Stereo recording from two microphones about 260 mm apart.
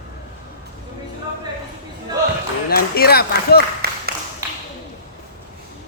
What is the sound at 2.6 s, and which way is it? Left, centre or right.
Speech, left.